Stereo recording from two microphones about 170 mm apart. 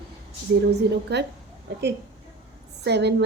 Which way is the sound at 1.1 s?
80° right.